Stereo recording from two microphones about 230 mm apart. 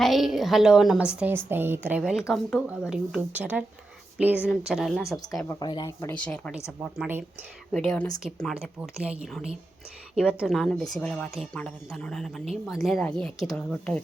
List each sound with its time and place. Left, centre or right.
0.0 s a woman's voice: centre
5.5 s a woman's voice: centre